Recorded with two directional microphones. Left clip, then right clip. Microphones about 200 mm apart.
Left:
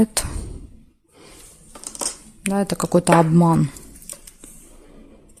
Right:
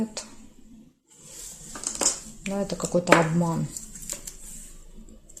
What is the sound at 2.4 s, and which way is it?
Speech, 50° left (ahead or behind).